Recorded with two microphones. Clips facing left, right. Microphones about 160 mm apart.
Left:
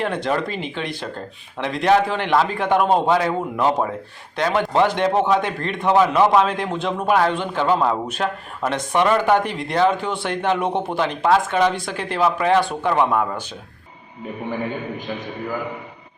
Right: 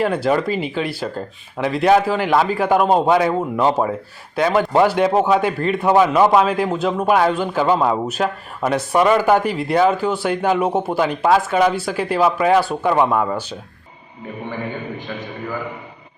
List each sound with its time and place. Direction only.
0.0 s speech: 5° right (ahead or behind)